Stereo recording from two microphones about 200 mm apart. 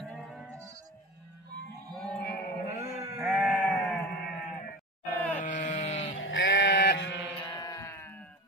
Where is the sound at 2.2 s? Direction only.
55° left (ahead or behind).